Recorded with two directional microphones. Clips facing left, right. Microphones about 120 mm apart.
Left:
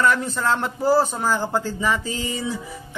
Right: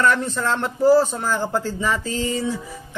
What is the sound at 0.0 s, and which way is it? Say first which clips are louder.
A man's voice: right 1 dB; 10° left (ahead or behind).